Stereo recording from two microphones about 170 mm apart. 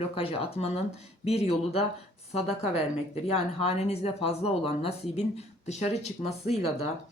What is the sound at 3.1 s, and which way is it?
Speech, 40° left (ahead or behind).